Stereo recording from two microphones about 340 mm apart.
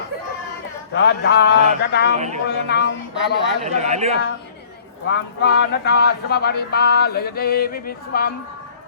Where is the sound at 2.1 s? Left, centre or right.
Centre.